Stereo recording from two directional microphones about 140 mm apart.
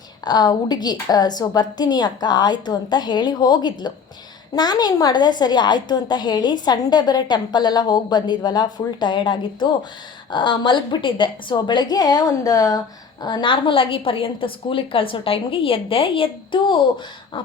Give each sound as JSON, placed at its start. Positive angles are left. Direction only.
{"t": 0.3, "sound": "a woman's voice", "side_deg": 30}